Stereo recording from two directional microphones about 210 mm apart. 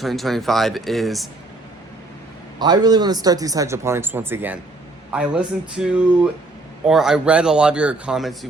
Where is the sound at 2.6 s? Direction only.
20° right (ahead or behind).